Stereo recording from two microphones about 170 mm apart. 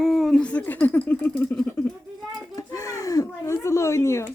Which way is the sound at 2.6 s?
20° left (ahead or behind).